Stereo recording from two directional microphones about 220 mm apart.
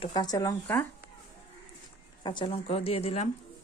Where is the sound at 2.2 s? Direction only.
20° left (ahead or behind).